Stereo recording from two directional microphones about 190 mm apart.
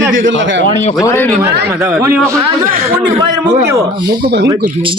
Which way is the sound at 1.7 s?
10° right (ahead or behind).